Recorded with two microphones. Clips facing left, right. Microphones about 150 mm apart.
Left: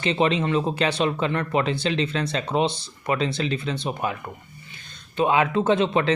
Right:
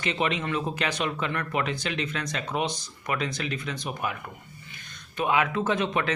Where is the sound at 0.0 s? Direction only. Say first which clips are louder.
Left 6 dB; 30° left (ahead or behind).